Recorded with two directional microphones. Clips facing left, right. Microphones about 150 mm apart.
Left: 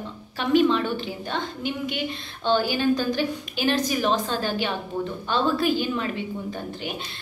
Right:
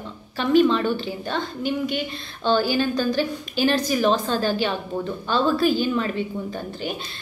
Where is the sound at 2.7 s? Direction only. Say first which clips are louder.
Right 1 dB; 15° left (ahead or behind).